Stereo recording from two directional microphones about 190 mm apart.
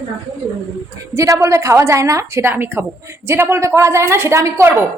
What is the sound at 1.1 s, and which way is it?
A woman's voice, 15° right (ahead or behind).